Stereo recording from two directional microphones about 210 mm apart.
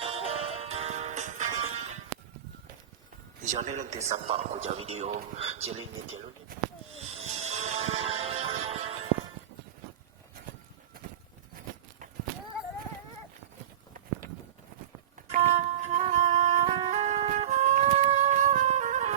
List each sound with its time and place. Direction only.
0.0 s music: 25° right (ahead or behind)
3.4 s speech: 35° right (ahead or behind)
5.6 s speech: 75° right (ahead or behind)
6.9 s music: 30° right (ahead or behind)
15.3 s music: 30° right (ahead or behind)